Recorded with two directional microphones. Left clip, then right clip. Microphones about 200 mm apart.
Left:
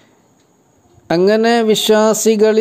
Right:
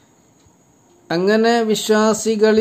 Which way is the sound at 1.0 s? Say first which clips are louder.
Left 3 dB; 35° left (ahead or behind).